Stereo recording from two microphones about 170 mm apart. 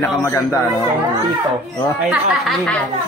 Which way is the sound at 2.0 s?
Centre (ahead or behind).